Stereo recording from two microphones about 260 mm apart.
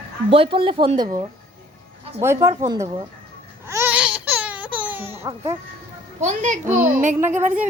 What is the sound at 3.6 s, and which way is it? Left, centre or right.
Baby cry, centre.